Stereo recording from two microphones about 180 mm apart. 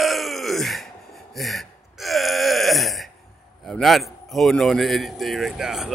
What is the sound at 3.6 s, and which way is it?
Speech, centre (ahead or behind).